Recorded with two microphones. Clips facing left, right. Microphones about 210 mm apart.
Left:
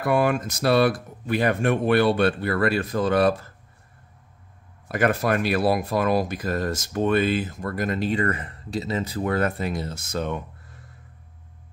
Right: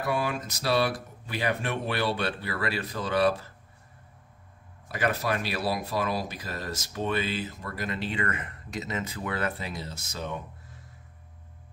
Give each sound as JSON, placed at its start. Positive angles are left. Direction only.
{"t": 0.0, "sound": "speech", "side_deg": 55}
{"t": 4.8, "sound": "speech", "side_deg": 50}